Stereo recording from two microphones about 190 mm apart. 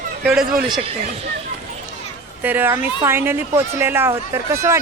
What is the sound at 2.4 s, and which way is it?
Speech, 10° right (ahead or behind).